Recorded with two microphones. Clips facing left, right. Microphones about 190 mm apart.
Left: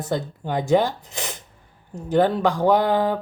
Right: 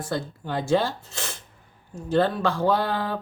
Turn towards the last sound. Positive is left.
turn(degrees=15)  # may be behind; listen again after turning